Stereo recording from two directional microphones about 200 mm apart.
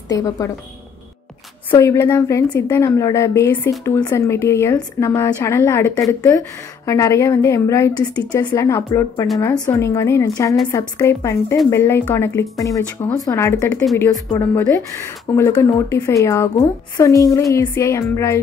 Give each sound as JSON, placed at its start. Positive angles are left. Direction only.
{"t": 0.1, "sound": "speech", "side_deg": 20}
{"t": 1.8, "sound": "speech", "side_deg": 10}